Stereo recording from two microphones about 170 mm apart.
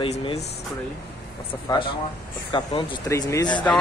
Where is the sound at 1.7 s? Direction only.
25° left (ahead or behind).